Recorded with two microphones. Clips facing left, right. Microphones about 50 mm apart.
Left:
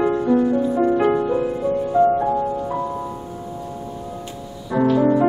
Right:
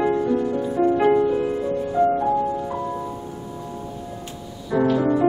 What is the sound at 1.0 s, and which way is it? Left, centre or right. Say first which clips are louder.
Music: right 1 dB; centre.